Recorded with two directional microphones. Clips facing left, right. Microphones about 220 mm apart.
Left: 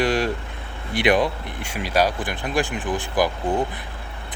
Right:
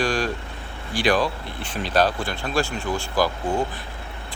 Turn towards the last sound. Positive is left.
turn(degrees=20)  # may be behind; listen again after turning